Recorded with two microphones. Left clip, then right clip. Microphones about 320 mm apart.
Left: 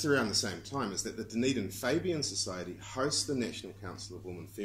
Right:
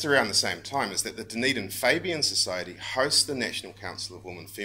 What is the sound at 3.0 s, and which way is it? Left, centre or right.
Speech, right.